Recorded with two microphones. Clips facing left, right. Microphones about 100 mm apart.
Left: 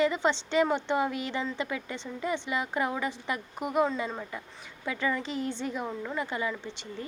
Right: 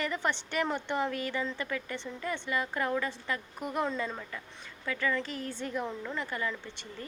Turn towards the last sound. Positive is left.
turn(degrees=20)  # may be behind; listen again after turning